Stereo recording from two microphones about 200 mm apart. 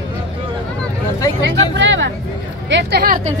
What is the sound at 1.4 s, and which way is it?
Speech, 65° right (ahead or behind).